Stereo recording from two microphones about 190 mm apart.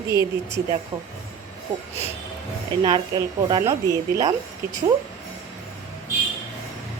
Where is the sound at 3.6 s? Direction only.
15° right (ahead or behind).